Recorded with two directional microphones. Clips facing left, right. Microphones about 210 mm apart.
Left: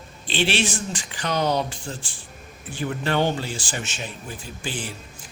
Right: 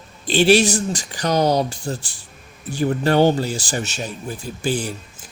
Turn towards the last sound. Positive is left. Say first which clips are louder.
# right 9 dB
turn(degrees=-40)  # may be behind; listen again after turning